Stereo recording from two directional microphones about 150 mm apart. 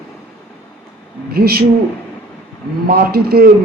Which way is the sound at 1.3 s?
90° right.